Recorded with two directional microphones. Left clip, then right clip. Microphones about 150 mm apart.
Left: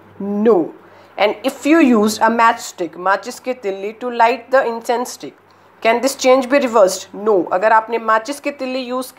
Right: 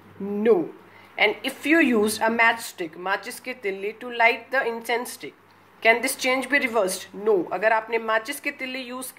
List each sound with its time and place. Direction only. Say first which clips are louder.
0.3 s a woman's voice: left 7 dB; 25° left (ahead or behind)